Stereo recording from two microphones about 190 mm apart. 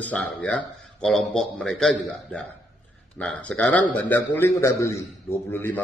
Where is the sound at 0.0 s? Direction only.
10° left (ahead or behind).